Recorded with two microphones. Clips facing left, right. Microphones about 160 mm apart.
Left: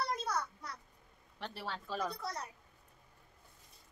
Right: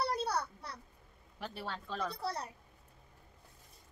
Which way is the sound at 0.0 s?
35° right (ahead or behind).